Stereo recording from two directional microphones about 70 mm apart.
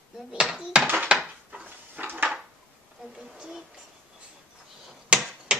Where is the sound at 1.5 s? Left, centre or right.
Right.